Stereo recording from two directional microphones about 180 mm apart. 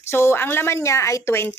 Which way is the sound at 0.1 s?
15° left (ahead or behind).